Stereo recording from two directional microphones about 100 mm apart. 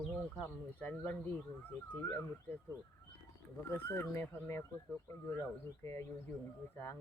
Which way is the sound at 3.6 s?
25° left (ahead or behind).